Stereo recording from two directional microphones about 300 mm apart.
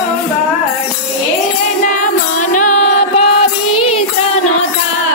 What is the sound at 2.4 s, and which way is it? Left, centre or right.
Music, left.